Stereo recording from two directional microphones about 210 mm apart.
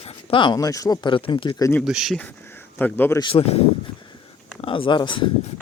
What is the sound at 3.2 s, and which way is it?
Speech, 25° left (ahead or behind).